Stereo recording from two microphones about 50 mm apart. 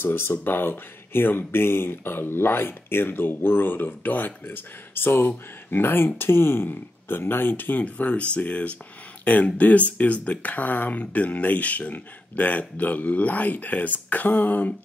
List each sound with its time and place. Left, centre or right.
0.0 s speech: left
7.8 s speech: left